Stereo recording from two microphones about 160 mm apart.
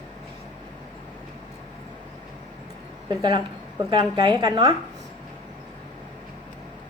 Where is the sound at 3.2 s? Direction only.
25° right (ahead or behind).